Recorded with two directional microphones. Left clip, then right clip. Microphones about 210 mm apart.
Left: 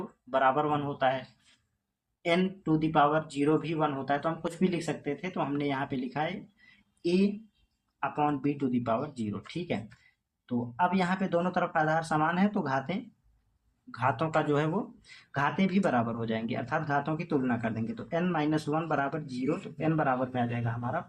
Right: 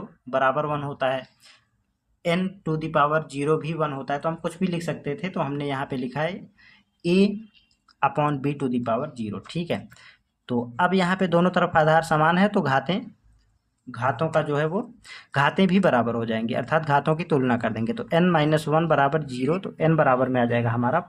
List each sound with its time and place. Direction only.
0.3 s speech: 25° right (ahead or behind)
2.2 s speech: 30° right (ahead or behind)
13.9 s speech: 20° right (ahead or behind)
15.0 s speech: 35° right (ahead or behind)